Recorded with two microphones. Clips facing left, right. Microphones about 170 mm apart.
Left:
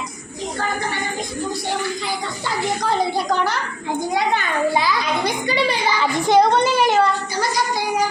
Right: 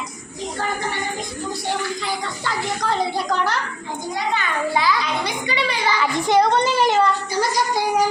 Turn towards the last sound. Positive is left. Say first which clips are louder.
# left 1 dB
turn(degrees=5)  # may be behind; listen again after turning